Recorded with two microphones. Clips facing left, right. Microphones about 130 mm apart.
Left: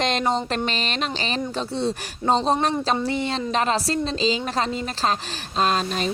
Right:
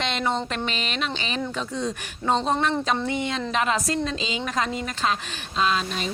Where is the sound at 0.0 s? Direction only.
40° left (ahead or behind).